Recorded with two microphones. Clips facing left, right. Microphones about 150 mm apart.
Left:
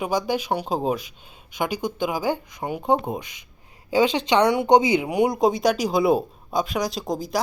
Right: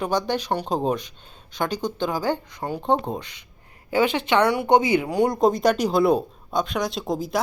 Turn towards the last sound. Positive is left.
turn(degrees=0)  # may be behind; listen again after turning